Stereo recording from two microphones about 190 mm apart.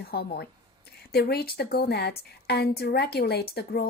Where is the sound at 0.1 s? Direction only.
55° left (ahead or behind).